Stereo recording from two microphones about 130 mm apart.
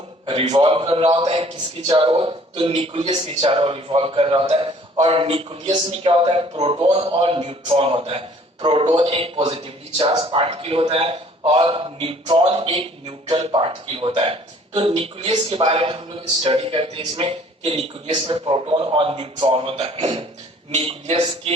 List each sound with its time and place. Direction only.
0.3 s a man's voice: 50° right (ahead or behind)